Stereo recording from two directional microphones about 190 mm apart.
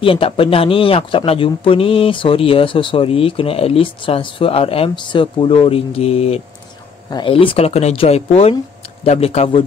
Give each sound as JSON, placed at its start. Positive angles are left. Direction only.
{"t": 0.0, "sound": "speech", "side_deg": 30}